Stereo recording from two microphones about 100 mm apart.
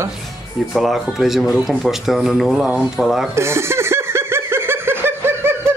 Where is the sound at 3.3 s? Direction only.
25° right (ahead or behind).